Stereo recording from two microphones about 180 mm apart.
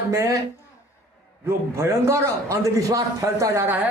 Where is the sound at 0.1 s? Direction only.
15° right (ahead or behind).